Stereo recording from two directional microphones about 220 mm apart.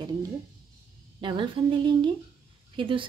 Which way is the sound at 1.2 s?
20° right (ahead or behind).